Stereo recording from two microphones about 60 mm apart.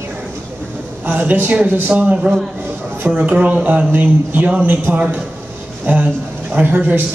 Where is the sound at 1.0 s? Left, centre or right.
Right.